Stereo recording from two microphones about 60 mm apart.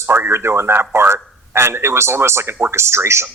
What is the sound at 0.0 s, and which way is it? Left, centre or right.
Speech, right.